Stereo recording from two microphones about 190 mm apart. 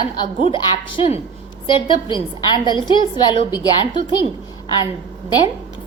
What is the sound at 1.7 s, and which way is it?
A woman's voice, 25° left (ahead or behind).